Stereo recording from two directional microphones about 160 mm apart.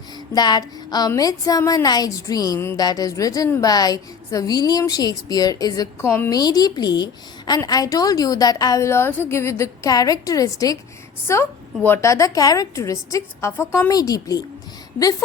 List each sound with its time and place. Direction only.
0.3 s a woman's voice: 25° left (ahead or behind)